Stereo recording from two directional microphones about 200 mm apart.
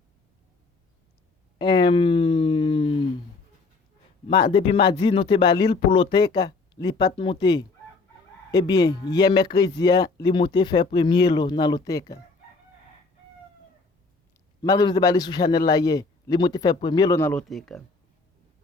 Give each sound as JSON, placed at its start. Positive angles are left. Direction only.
{"t": 1.5, "sound": "a sound", "side_deg": 20}
{"t": 4.3, "sound": "speech", "side_deg": 25}
{"t": 14.6, "sound": "speech", "side_deg": 20}